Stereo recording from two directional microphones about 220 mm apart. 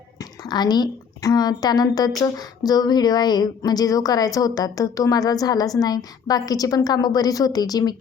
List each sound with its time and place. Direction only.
0.2 s a woman's voice: 20° left (ahead or behind)